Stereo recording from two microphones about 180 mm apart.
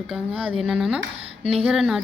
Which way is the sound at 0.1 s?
5° right (ahead or behind).